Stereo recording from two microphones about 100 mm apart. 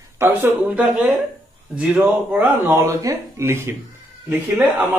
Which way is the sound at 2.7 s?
25° right (ahead or behind).